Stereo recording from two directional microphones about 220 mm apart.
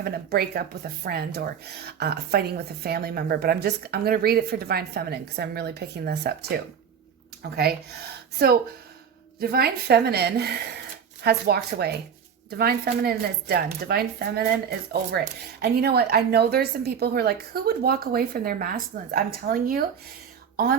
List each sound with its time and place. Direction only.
0.0 s speech: 45° right (ahead or behind)
9.4 s speech: 45° right (ahead or behind)